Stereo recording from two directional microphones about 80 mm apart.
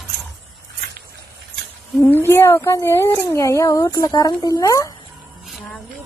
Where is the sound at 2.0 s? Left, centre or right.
Left.